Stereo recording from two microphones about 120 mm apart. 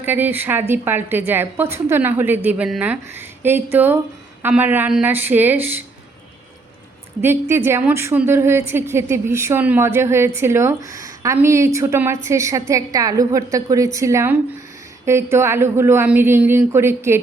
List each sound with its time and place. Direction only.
0.0 s a woman's voice: 15° right (ahead or behind)
7.2 s a woman's voice: 20° right (ahead or behind)